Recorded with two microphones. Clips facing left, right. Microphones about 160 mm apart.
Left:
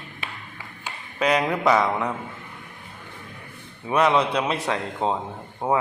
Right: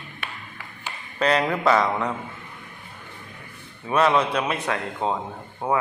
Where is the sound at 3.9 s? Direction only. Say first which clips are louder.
Even; 15° left (ahead or behind).